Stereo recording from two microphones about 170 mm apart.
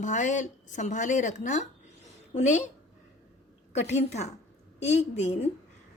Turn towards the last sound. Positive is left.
turn(degrees=40)  # may be behind; listen again after turning